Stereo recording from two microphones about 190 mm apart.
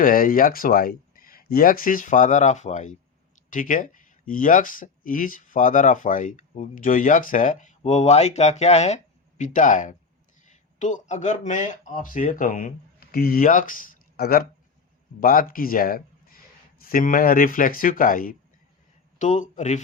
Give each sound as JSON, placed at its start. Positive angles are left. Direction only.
{"t": 0.0, "sound": "speech", "side_deg": 45}